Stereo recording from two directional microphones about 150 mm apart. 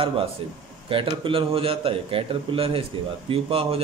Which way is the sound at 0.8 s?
35° right (ahead or behind).